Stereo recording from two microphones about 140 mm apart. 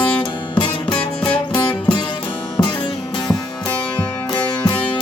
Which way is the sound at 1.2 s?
35° left (ahead or behind).